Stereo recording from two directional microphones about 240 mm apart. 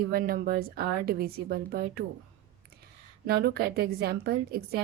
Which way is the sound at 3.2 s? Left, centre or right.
Right.